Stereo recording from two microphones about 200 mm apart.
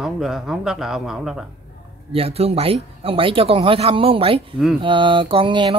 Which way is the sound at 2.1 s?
30° right (ahead or behind).